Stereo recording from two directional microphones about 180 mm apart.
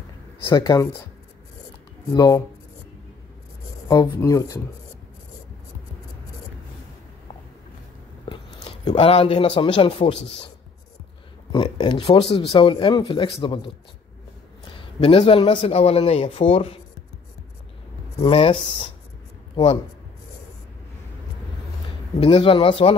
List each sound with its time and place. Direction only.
0.5 s speech: 20° left (ahead or behind)
2.1 s speech: 20° left (ahead or behind)
3.9 s speech: 20° left (ahead or behind)
8.3 s a sound: 25° left (ahead or behind)
9.6 s speech: 30° left (ahead or behind)
11.5 s speech: 30° left (ahead or behind)
15.0 s speech: 30° left (ahead or behind)
18.2 s speech: 30° left (ahead or behind)
22.2 s speech: 30° left (ahead or behind)